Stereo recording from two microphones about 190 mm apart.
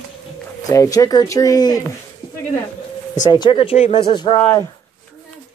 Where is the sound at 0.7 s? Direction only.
15° left (ahead or behind).